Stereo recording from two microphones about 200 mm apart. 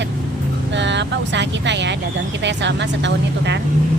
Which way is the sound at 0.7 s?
60° right (ahead or behind).